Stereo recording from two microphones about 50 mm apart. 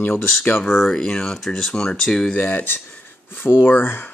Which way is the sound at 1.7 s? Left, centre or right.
Centre.